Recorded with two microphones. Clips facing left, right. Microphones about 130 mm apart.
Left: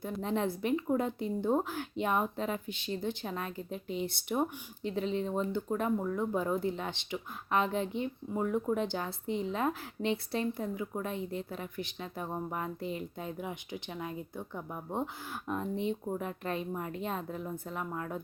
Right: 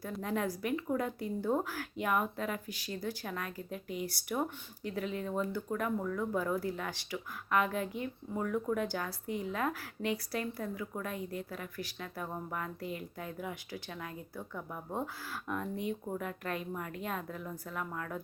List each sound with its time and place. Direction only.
0.2 s a woman's voice: 25° left (ahead or behind)